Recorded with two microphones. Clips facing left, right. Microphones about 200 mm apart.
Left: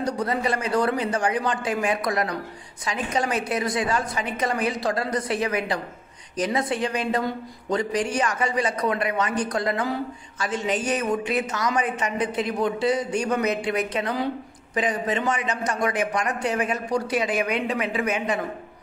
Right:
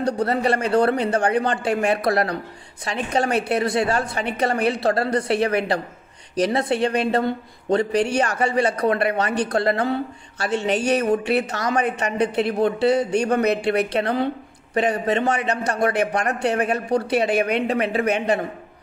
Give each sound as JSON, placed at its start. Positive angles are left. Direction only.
{"t": 0.0, "sound": "a woman's voice", "side_deg": -65}
{"t": 6.6, "sound": "a woman's voice", "side_deg": -65}